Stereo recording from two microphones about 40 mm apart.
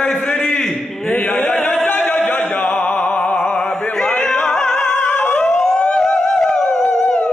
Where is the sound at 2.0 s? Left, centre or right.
Left.